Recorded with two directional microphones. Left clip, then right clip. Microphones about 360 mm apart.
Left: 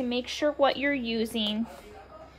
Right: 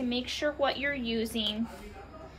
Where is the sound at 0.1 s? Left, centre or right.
Left.